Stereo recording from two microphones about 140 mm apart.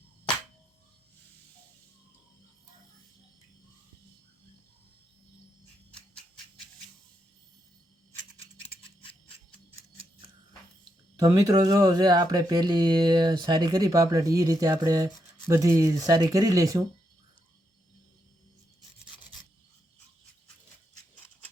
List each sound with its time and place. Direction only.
11.2 s speech: 25° right (ahead or behind)